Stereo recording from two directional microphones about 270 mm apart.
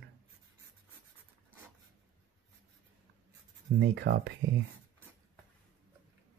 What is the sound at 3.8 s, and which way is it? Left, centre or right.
Speech, right.